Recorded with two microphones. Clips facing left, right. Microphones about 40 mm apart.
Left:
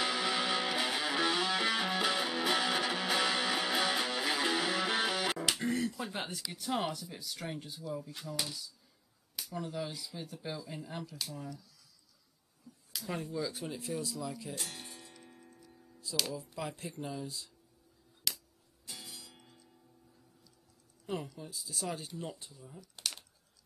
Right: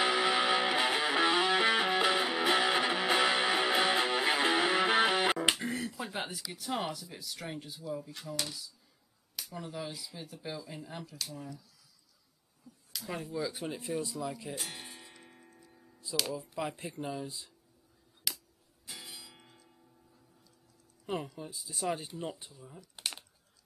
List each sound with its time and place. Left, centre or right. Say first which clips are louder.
0.0 s music: right 5 dB; right
5.6 s a sound: left 2 dB; centre
6.5 s speech: left 1 dB; centre
13.0 s speech: right 1 dB; centre
18.3 s music: even; centre
18.9 s music: right 2 dB; centre
21.0 s speech: right 2 dB; centre